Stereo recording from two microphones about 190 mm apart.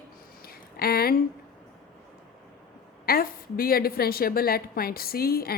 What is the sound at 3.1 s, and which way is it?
A woman's voice, 50° left (ahead or behind).